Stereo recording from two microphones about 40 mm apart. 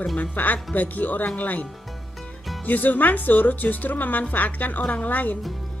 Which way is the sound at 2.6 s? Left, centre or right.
Left.